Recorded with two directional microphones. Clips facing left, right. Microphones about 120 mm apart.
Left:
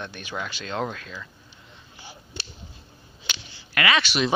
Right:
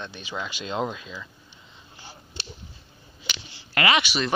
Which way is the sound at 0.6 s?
5° right (ahead or behind).